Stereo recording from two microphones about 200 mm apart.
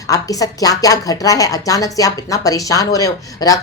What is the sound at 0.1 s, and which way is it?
A woman's voice, 15° left (ahead or behind).